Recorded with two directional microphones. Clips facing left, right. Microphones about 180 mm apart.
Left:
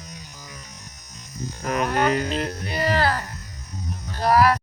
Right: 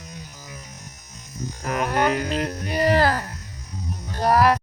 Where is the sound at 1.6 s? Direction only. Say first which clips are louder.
Even; 5° right (ahead or behind).